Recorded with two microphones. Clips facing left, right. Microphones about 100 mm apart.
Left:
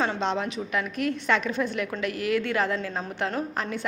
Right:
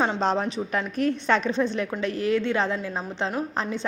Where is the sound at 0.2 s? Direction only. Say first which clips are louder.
Right 3 dB; 35° right (ahead or behind).